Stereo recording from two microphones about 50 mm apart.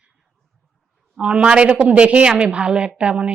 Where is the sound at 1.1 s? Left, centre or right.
Right.